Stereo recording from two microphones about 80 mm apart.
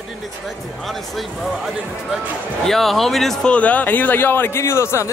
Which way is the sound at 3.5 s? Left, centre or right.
Centre.